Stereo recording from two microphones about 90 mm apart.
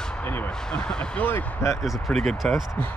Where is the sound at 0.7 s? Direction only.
10° left (ahead or behind).